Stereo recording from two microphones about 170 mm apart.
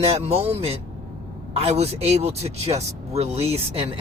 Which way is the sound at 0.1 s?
35° right (ahead or behind).